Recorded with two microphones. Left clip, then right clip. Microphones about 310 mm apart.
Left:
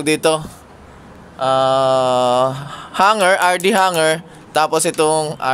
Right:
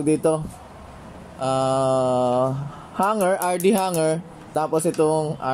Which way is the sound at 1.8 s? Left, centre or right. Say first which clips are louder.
Left 6 dB; left.